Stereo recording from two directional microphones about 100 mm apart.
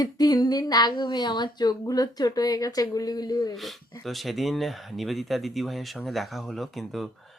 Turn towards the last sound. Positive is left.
turn(degrees=0)  # may be behind; listen again after turning